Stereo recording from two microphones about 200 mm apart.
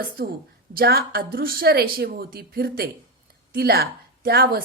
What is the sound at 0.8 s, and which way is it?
A woman's voice, 50° right (ahead or behind).